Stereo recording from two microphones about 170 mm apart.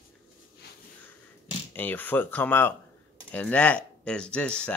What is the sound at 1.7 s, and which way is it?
Speech, 10° left (ahead or behind).